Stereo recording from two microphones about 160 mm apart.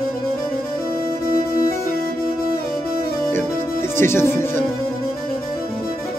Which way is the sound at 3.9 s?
15° left (ahead or behind).